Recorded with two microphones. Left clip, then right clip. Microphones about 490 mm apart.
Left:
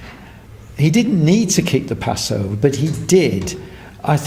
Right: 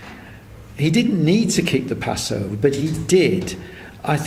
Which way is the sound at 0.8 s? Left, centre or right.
Left.